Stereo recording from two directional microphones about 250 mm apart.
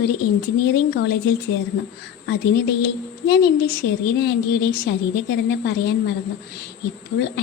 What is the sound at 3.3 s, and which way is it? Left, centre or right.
A woman's voice, left.